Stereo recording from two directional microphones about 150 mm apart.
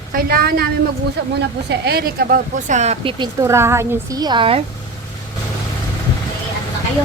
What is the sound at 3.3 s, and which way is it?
A woman's voice, 20° right (ahead or behind).